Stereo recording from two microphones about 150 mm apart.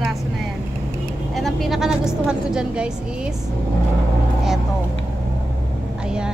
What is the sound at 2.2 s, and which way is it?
Speech, 5° right (ahead or behind).